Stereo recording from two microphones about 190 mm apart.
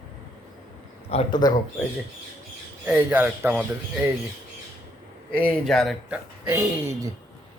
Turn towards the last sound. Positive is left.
turn(degrees=-15)  # may be behind; listen again after turning